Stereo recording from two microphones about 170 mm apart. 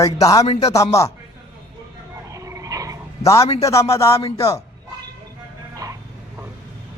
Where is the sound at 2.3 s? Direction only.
20° right (ahead or behind).